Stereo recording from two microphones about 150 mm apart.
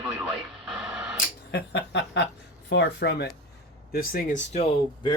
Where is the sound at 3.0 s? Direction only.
90° left.